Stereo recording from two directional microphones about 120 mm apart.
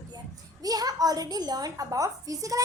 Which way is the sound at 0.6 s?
30° right (ahead or behind).